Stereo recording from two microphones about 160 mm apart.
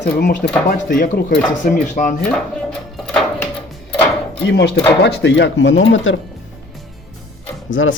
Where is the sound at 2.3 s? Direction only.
5° left (ahead or behind).